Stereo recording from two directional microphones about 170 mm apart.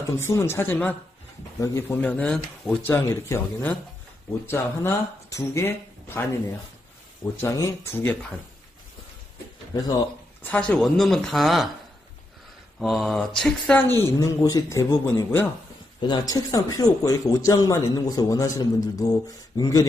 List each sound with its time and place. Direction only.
0.2 s speech: 15° left (ahead or behind)
2.9 s speech: 15° left (ahead or behind)
7.3 s speech: 15° left (ahead or behind)
10.4 s speech: 10° left (ahead or behind)
12.7 s speech: centre (ahead or behind); by 19.9 s 20° left (ahead or behind)